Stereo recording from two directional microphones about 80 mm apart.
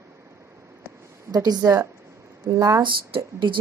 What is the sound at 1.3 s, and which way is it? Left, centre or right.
Speech, right.